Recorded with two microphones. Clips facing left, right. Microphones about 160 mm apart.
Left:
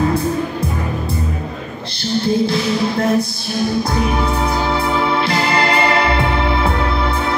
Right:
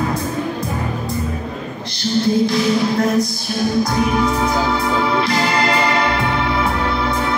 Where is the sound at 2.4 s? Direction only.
30° left (ahead or behind).